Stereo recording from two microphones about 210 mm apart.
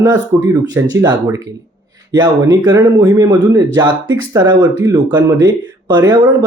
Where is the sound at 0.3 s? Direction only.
15° right (ahead or behind).